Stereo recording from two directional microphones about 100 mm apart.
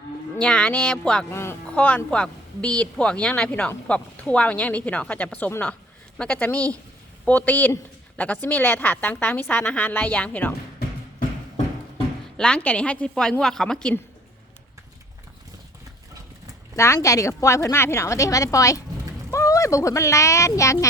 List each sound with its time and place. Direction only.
0.3 s speech: 10° left (ahead or behind)
1.3 s speech: 25° left (ahead or behind)
1.7 s speech: 15° left (ahead or behind)
12.4 s a woman's voice: 10° left (ahead or behind)
16.7 s a woman's voice: 30° left (ahead or behind)